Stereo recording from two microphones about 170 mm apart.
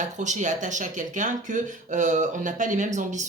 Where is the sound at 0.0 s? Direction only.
45° right (ahead or behind).